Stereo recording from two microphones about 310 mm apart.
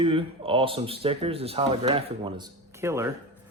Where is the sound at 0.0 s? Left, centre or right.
Centre.